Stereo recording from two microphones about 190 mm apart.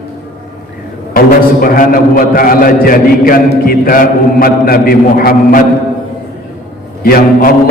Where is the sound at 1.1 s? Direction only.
50° left (ahead or behind).